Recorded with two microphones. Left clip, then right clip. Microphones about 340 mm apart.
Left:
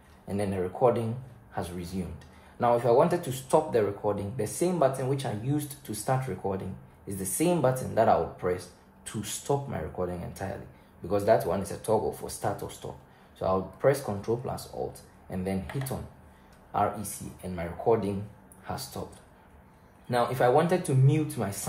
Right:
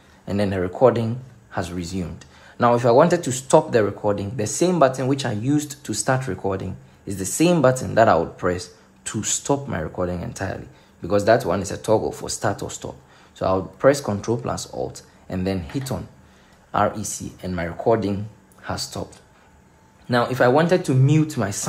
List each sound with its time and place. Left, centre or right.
0.3 s speech: right
16.7 s speech: right
18.6 s a sound: right
20.1 s speech: right